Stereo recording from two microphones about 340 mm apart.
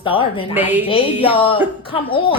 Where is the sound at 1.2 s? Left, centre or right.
Centre.